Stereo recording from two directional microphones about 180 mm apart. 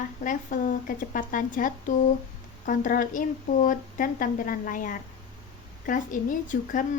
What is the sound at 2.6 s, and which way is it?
Speech, 45° left (ahead or behind).